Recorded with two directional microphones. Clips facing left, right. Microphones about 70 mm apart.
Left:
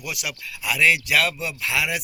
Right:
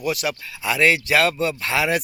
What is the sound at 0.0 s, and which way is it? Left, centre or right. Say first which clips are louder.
Speech: right 8 dB; right.